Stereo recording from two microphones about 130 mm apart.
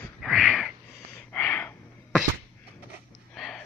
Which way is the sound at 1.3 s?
10° left (ahead or behind).